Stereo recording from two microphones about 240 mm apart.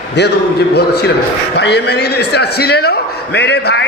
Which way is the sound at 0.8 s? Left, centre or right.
Left.